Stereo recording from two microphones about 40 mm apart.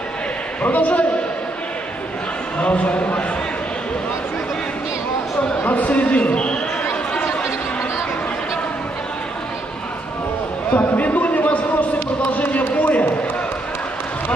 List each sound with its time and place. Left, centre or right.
0.6 s speech: left
2.6 s speech: left
5.7 s speech: left
6.8 s chatter: left
10.7 s a sound: left
12.3 s basketball bounce: left